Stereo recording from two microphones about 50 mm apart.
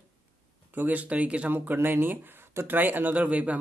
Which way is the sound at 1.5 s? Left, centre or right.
Right.